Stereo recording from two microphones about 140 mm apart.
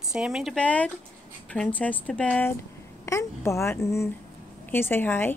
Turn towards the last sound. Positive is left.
turn(degrees=15)  # may be behind; listen again after turning